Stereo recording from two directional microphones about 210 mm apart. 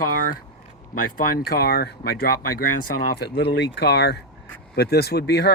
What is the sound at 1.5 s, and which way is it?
Speech, 45° left (ahead or behind).